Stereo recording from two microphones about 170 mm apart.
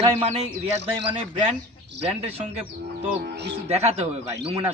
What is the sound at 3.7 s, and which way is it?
A man's voice, 40° right (ahead or behind).